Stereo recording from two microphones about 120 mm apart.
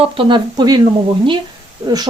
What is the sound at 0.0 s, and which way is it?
Speech, 50° right (ahead or behind).